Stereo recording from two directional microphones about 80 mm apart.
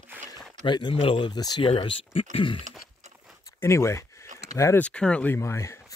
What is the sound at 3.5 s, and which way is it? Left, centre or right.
Speech, left.